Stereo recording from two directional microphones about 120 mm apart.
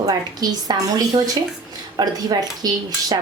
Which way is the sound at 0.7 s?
35° right (ahead or behind).